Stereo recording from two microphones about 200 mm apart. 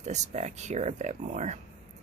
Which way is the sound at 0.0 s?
35° right (ahead or behind).